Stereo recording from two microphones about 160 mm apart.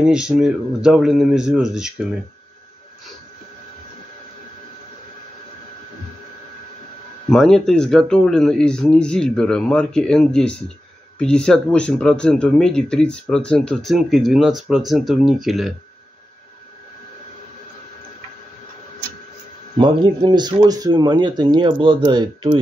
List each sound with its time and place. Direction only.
0.0 s speech: 5° right (ahead or behind)
7.2 s speech: 5° left (ahead or behind)
19.8 s speech: 30° right (ahead or behind)